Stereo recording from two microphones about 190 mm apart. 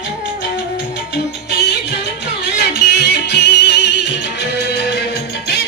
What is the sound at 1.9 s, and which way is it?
Music, 60° left (ahead or behind).